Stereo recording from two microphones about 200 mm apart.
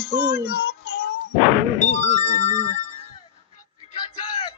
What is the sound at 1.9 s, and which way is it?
Music, 35° left (ahead or behind).